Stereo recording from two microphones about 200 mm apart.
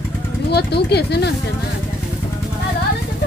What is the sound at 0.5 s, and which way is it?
Speech, 55° left (ahead or behind).